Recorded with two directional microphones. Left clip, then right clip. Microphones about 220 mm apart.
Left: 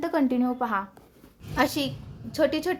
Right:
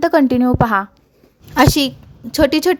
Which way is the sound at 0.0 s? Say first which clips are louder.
Right 12 dB; 40° right (ahead or behind).